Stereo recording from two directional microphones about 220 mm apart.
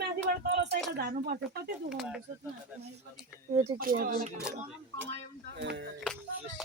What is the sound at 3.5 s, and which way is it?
Speech, 30° right (ahead or behind).